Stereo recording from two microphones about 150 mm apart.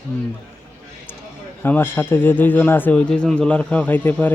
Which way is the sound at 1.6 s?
15° left (ahead or behind).